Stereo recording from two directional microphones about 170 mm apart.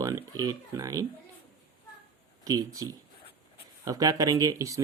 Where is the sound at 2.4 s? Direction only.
20° right (ahead or behind).